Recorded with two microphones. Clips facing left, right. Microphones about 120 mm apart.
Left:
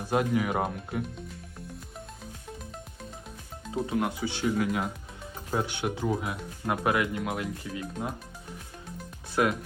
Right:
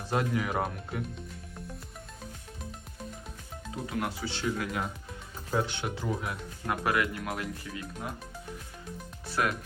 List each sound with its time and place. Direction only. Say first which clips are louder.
0.1 s speech: left 3 dB; 15° left (ahead or behind)
3.8 s speech: left 3 dB; 15° left (ahead or behind)
9.3 s speech: left 4 dB; 15° left (ahead or behind)